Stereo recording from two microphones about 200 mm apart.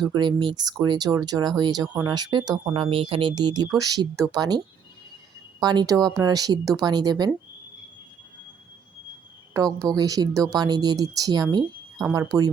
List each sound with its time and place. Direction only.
0.1 s speech: 20° right (ahead or behind)
9.5 s speech: 15° right (ahead or behind)